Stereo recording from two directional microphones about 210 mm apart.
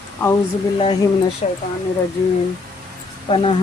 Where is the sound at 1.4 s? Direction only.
30° left (ahead or behind).